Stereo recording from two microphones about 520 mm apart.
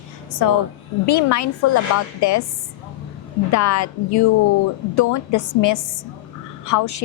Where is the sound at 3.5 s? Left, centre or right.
Left.